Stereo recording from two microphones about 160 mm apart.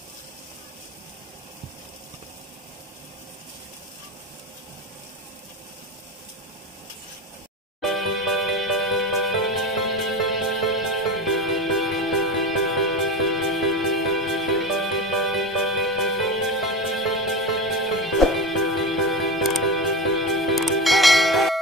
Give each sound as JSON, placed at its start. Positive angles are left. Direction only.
{"t": 7.8, "sound": "music", "side_deg": 0}